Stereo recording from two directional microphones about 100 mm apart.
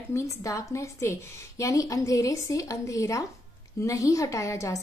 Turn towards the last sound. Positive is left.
turn(degrees=30)  # may be behind; listen again after turning